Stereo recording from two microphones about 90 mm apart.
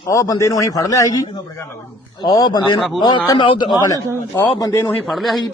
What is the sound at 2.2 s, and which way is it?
Speech, 50° left (ahead or behind).